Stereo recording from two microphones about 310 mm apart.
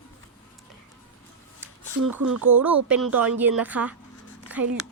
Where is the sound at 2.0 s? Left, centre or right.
Right.